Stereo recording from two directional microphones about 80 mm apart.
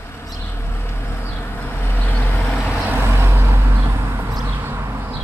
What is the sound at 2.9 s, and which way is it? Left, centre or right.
Vehicle, right.